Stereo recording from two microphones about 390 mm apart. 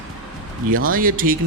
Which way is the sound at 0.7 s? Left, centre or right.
Right.